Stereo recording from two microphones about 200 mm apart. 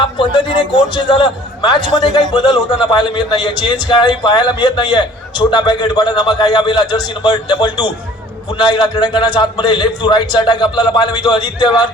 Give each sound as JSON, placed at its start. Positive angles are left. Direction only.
{"t": 0.9, "sound": "a man's voice", "side_deg": 25}